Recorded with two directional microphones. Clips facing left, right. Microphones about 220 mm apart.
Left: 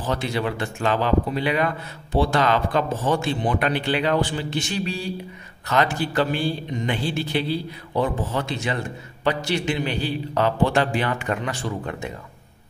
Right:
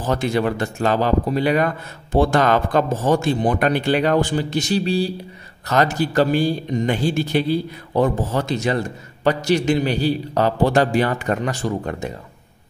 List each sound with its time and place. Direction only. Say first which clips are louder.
0.0 s a man's voice: right 5 dB; 45° right (ahead or behind)